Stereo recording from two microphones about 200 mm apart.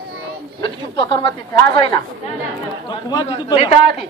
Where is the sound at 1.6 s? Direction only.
25° left (ahead or behind).